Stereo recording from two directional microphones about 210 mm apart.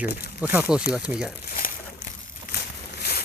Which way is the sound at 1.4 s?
40° left (ahead or behind).